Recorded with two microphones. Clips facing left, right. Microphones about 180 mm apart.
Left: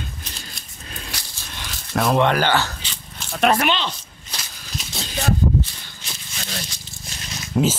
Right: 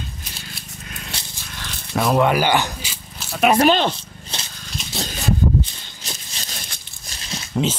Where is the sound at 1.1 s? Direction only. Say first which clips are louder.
Right 1 dB; 25° right (ahead or behind).